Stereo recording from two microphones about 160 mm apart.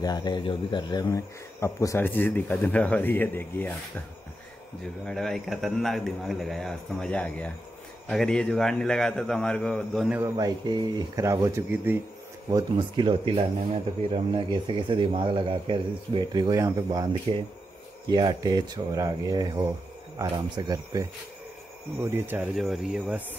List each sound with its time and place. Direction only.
0.0 s speech: 25° left (ahead or behind); by 3.7 s 10° left (ahead or behind)
5.0 s a man's voice: 5° left (ahead or behind)
10.3 s speech: 25° right (ahead or behind)
12.4 s a man's voice: 25° right (ahead or behind); by 23.2 s 5° right (ahead or behind)